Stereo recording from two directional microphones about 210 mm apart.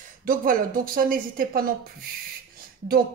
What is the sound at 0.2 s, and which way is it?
A woman's voice, 40° right (ahead or behind).